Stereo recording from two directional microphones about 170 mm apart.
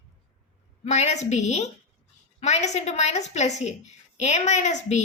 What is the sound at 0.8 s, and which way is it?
A woman's voice, 40° left (ahead or behind).